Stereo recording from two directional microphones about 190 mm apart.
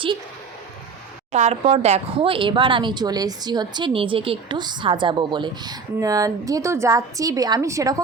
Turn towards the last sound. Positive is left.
turn(degrees=-15)  # may be behind; listen again after turning